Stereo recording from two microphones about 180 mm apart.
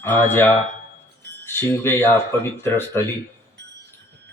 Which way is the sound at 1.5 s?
10° left (ahead or behind).